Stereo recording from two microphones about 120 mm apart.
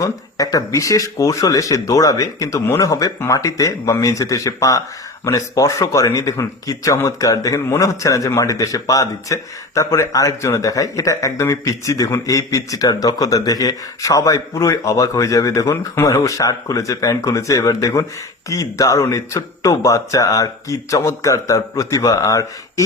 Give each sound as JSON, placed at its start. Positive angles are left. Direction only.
{"t": 0.0, "sound": "speech", "side_deg": 30}